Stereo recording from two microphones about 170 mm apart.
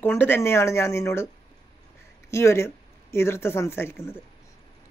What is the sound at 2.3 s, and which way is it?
Speech, 15° left (ahead or behind).